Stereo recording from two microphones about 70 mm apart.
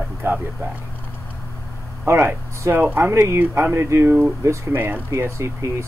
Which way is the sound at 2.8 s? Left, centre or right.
Right.